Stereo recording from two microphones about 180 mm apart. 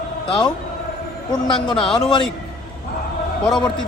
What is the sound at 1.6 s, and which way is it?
Speech, 5° left (ahead or behind).